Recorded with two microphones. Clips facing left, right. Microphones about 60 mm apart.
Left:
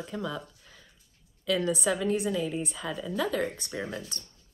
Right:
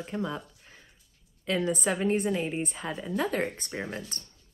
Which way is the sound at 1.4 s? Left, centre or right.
Right.